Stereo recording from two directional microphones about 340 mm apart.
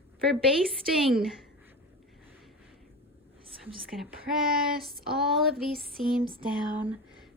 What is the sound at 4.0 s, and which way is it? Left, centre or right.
A woman's voice, centre.